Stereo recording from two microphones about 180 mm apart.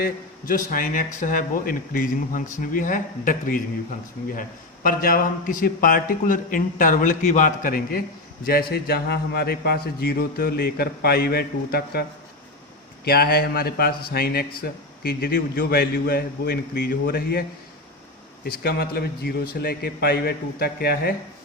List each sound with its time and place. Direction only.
0.0 s a man's voice: 50° left (ahead or behind)
13.1 s a man's voice: 60° left (ahead or behind)
18.4 s a man's voice: 55° left (ahead or behind)